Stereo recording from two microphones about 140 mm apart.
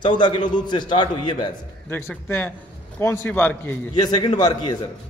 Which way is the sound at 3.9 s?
30° left (ahead or behind).